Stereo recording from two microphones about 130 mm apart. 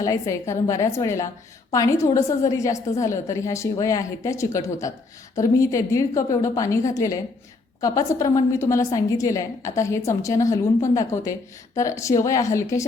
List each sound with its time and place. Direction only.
0.0 s a woman's voice: 25° left (ahead or behind)